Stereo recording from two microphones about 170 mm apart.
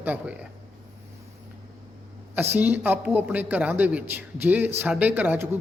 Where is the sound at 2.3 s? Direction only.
10° right (ahead or behind).